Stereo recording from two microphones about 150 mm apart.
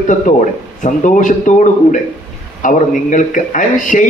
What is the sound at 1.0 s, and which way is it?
A man's voice, 55° left (ahead or behind).